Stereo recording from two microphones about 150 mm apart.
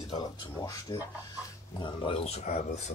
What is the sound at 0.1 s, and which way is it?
Speech, 25° left (ahead or behind).